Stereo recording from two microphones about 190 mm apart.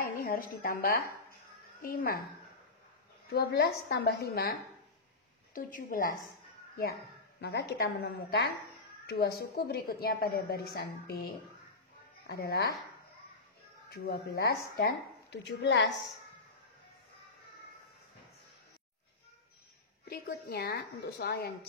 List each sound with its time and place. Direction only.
0.0 s a woman's voice: 50° left (ahead or behind)
3.3 s a woman's voice: 55° left (ahead or behind)
6.8 s a woman's voice: 60° left (ahead or behind)
13.9 s a woman's voice: 55° left (ahead or behind)
20.1 s a woman's voice: 55° left (ahead or behind)